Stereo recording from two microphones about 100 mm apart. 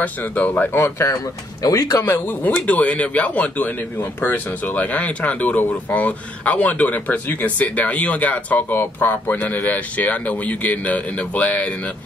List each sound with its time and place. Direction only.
0.0 s speech: 15° left (ahead or behind); by 2.0 s 35° left (ahead or behind)
2.0 s speech: 20° left (ahead or behind)